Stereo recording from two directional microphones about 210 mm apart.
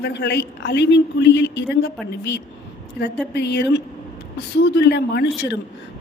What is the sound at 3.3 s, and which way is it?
A woman's voice, 50° left (ahead or behind).